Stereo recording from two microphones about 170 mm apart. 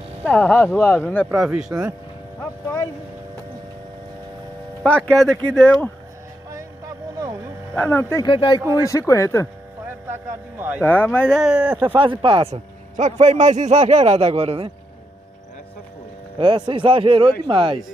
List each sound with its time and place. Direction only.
0.2 s speech: 10° left (ahead or behind)
4.8 s speech: 5° left (ahead or behind)
7.7 s speech: 10° left (ahead or behind)
8.3 s speech: 25° left (ahead or behind)
10.0 s speech: 15° right (ahead or behind)
10.8 s speech: 10° left (ahead or behind); by 11.8 s 5° right (ahead or behind)
11.8 s speech: 30° right (ahead or behind)
12.9 s a man's voice: 45° right (ahead or behind)
16.3 s speech: 25° right (ahead or behind)